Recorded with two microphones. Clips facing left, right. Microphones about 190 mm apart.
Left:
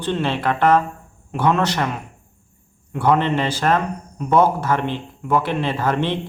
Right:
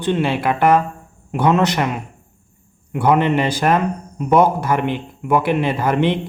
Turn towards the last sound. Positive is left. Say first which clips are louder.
# right 3 dB
turn(degrees=-15)  # may be behind; listen again after turning